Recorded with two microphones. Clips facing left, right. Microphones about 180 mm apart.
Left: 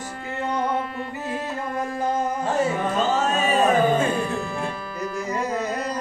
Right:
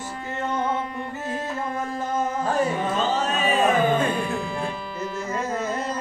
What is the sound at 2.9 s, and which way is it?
Music, 45° left (ahead or behind).